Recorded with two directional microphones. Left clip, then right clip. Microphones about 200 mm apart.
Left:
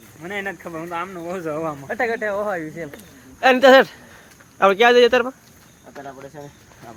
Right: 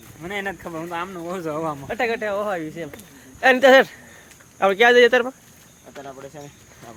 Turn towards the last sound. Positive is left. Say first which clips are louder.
# left 1 dB
turn(degrees=0)  # may be behind; listen again after turning